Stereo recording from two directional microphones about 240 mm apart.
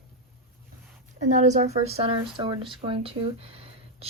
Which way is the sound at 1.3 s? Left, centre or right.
Right.